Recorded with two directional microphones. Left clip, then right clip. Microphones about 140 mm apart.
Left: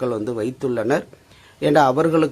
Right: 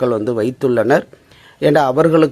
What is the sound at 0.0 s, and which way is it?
Speech, 35° right (ahead or behind).